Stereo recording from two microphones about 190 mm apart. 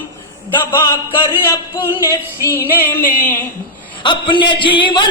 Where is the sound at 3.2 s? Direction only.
10° left (ahead or behind).